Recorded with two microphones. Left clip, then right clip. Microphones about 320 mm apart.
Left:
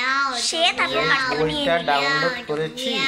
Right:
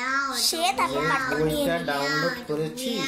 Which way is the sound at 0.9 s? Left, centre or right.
Centre.